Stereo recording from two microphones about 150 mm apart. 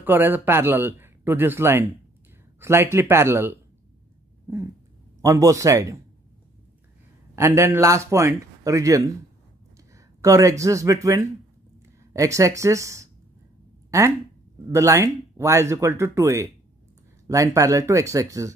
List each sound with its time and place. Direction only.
0.0 s speech: 15° right (ahead or behind)
5.2 s speech: 20° right (ahead or behind)
7.3 s speech: 20° right (ahead or behind)
13.8 s a sound: 20° right (ahead or behind)
14.7 s speech: 20° right (ahead or behind)